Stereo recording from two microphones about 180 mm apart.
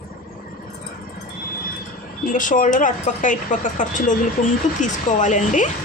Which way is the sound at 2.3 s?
45° left (ahead or behind).